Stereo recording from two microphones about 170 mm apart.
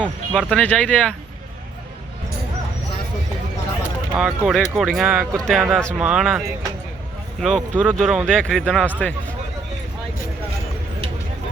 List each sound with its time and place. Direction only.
0.0 s speech: 10° right (ahead or behind)
0.5 s speech: 5° left (ahead or behind)
4.2 s speech: centre (ahead or behind)
7.4 s speech: 5° right (ahead or behind)